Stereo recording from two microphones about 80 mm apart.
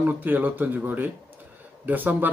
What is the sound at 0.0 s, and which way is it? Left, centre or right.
Speech, right.